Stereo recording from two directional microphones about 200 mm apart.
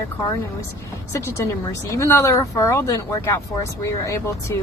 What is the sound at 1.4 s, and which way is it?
Speech, 15° left (ahead or behind).